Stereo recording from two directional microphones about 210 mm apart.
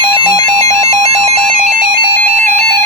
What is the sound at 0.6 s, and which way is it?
Alarm, 30° right (ahead or behind).